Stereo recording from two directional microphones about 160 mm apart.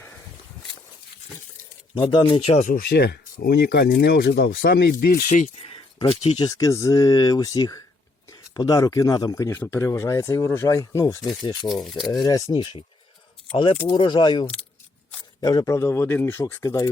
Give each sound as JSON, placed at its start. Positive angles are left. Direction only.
{"t": 2.0, "sound": "speech", "side_deg": 30}
{"t": 2.6, "sound": "speech", "side_deg": 60}
{"t": 5.3, "sound": "speech", "side_deg": 50}
{"t": 5.6, "sound": "speech", "side_deg": 35}
{"t": 6.6, "sound": "speech", "side_deg": 20}
{"t": 11.7, "sound": "speech", "side_deg": 0}
{"t": 12.0, "sound": "speech", "side_deg": 25}
{"t": 13.8, "sound": "speech", "side_deg": 30}